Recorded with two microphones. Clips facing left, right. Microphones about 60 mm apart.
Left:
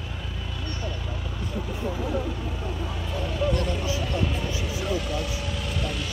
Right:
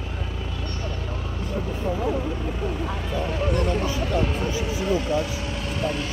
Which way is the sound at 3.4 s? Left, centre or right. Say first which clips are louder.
Right 1 dB; right.